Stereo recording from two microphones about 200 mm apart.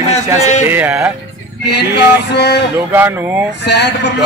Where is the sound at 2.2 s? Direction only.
55° left (ahead or behind).